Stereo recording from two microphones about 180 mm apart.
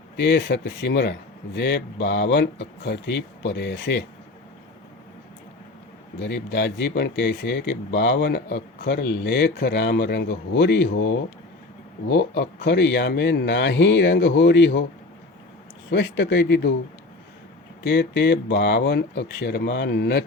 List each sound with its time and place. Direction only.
0.2 s speech: 75° left (ahead or behind)
6.1 s speech: 70° left (ahead or behind)
15.9 s speech: 80° left
17.8 s speech: 70° left (ahead or behind)